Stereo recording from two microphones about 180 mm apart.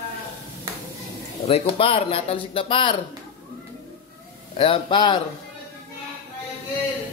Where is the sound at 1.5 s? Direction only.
30° left (ahead or behind).